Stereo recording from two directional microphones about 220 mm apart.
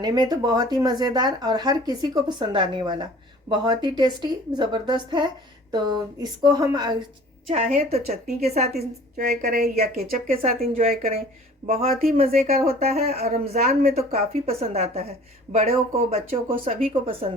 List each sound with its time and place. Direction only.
0.0 s speech: 20° right (ahead or behind)
7.4 s speech: 35° right (ahead or behind)
9.1 s speech: 40° right (ahead or behind)
9.7 s speech: 30° right (ahead or behind)
13.1 s speech: 30° right (ahead or behind)